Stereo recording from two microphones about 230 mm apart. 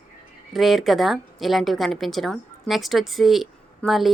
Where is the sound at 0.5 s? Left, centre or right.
Centre.